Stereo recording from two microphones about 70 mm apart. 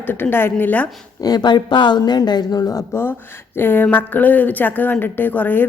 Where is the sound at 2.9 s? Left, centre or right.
Left.